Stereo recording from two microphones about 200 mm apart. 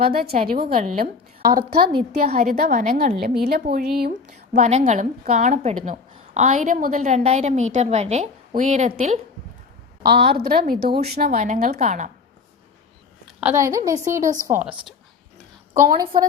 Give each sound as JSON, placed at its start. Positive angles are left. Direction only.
{"t": 0.0, "sound": "a woman's voice", "side_deg": -50}
{"t": 10.0, "sound": "a woman's voice", "side_deg": -55}
{"t": 11.3, "sound": "a woman's voice", "side_deg": -40}
{"t": 13.4, "sound": "a woman's voice", "side_deg": -10}